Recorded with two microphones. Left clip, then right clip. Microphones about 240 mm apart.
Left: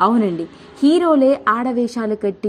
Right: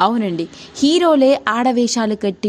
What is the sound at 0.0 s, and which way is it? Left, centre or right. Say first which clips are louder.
Speech: even; right.